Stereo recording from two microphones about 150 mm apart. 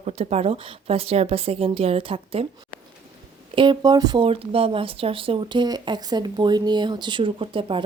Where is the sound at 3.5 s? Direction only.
30° right (ahead or behind).